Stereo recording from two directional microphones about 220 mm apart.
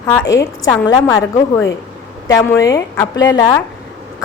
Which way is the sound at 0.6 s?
15° left (ahead or behind).